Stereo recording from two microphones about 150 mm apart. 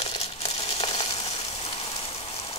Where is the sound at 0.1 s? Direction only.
40° left (ahead or behind).